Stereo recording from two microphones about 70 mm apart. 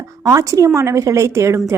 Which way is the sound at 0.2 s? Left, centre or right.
Right.